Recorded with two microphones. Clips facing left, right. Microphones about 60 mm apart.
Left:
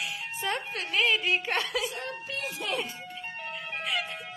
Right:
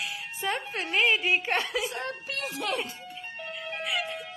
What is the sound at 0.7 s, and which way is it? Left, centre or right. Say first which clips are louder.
Speech: right 2 dB; right.